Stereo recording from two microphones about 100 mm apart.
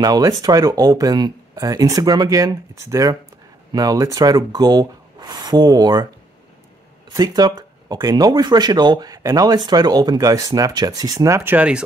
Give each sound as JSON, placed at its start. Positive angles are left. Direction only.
{"t": 0.0, "sound": "speech", "side_deg": -40}
{"t": 7.2, "sound": "speech", "side_deg": -40}
{"t": 11.5, "sound": "speech", "side_deg": -10}